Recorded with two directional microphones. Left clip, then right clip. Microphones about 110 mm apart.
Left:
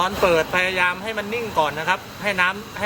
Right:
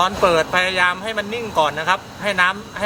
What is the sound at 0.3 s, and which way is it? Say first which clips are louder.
Speech: even; 15° right (ahead or behind).